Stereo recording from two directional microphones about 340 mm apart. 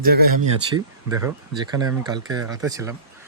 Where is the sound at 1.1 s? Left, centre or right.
Centre.